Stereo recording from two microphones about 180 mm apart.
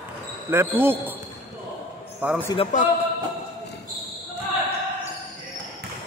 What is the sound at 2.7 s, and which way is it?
Speech, 45° left (ahead or behind).